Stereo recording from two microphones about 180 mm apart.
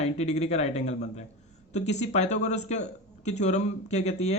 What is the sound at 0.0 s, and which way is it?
Speech, 35° left (ahead or behind).